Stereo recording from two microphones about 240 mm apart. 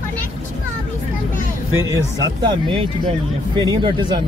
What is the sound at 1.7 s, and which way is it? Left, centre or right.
Speech, centre.